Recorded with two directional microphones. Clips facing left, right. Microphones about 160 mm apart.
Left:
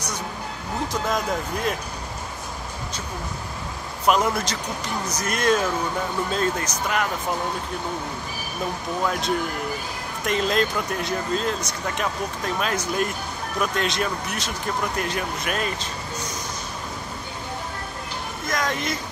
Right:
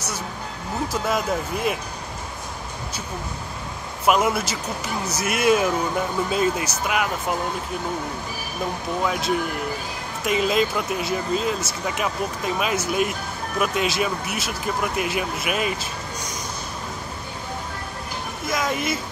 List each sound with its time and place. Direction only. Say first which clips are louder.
1.0 s speech: right 2 dB; 5° right (ahead or behind)
4.0 s speech: right 1 dB; 5° right (ahead or behind)
9.0 s speech: right 1 dB; 5° right (ahead or behind)
18.5 s speech: right 2 dB; 5° right (ahead or behind)